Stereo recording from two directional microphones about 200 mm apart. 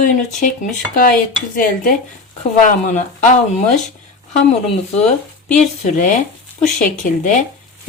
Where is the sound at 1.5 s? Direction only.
45° left (ahead or behind).